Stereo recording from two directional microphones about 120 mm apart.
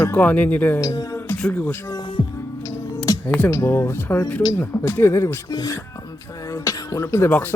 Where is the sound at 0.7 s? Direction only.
30° left (ahead or behind).